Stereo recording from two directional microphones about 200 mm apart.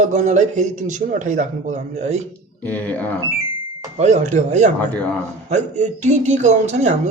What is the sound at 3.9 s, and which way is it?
Speech, 35° right (ahead or behind).